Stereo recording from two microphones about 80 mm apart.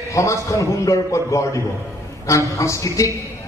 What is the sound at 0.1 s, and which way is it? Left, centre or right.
A man's voice, left.